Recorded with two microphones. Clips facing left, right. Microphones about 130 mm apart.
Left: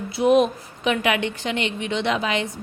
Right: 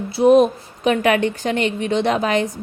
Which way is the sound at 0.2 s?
40° right (ahead or behind).